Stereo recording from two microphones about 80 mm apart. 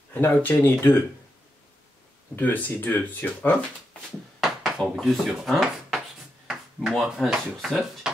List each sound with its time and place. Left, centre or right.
0.1 s speech: left
2.3 s speech: left
4.4 s speech: centre